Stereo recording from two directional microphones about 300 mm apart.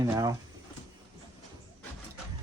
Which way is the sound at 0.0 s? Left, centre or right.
Centre.